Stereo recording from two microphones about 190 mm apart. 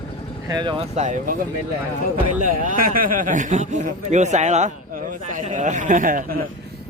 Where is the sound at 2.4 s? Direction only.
45° right (ahead or behind).